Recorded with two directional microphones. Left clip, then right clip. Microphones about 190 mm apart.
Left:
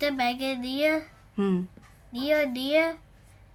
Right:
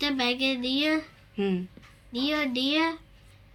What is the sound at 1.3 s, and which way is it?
Speech, 45° left (ahead or behind).